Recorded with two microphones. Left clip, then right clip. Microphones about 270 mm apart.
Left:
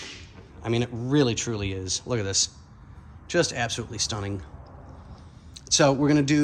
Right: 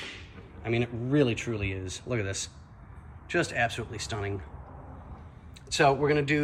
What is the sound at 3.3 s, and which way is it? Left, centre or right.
Speech, centre.